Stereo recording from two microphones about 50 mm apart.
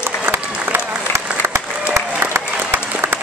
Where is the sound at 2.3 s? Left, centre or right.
Right.